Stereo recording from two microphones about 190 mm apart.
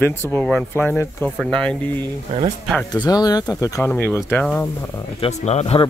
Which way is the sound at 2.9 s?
20° left (ahead or behind).